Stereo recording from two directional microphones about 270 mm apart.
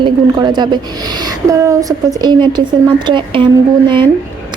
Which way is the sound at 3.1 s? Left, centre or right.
Centre.